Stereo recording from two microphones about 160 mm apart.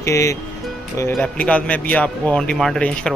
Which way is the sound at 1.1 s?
10° left (ahead or behind).